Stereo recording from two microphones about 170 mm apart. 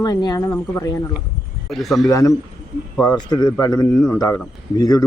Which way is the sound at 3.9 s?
10° left (ahead or behind).